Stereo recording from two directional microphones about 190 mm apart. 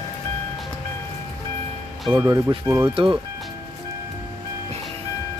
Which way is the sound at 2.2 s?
20° right (ahead or behind).